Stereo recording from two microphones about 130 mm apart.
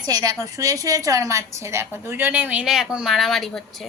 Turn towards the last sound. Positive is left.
turn(degrees=0)  # may be behind; listen again after turning